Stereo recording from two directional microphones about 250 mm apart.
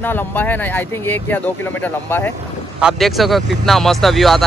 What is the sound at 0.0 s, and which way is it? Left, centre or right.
Speech, centre.